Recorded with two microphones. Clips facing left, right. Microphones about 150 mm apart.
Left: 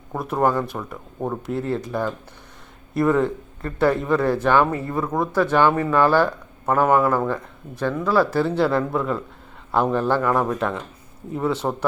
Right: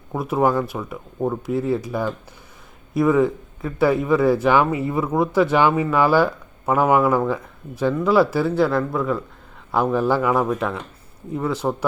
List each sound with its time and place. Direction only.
0.1 s a man's voice: 5° right (ahead or behind)